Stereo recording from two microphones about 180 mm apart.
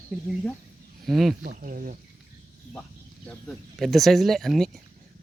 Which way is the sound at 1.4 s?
50° right (ahead or behind).